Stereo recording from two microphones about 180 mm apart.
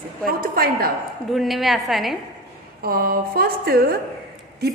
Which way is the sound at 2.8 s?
55° right (ahead or behind).